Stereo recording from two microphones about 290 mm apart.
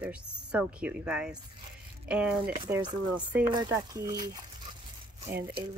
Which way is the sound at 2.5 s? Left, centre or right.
Centre.